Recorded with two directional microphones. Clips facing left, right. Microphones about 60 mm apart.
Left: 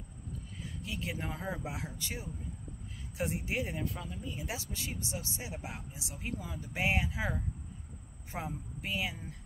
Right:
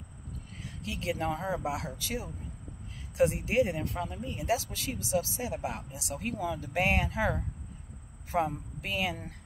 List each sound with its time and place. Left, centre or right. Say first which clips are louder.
0.6 s speech: right 2 dB; right
8.3 s speech: right 10 dB; right